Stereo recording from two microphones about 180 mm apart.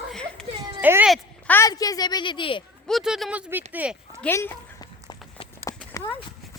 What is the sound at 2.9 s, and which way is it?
Speech, centre (ahead or behind).